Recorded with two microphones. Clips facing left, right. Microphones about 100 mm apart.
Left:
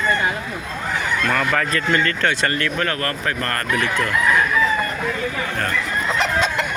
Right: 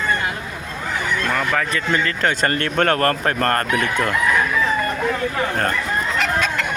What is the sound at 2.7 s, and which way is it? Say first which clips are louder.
Speech: right 6 dB; 50° right (ahead or behind).